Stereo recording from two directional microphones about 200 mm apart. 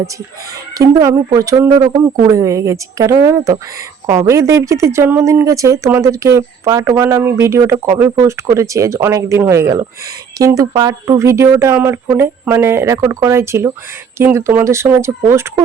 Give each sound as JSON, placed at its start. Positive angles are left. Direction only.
{"t": 0.8, "sound": "speech", "side_deg": -15}
{"t": 4.0, "sound": "speech", "side_deg": -25}
{"t": 4.3, "sound": "speech", "side_deg": -15}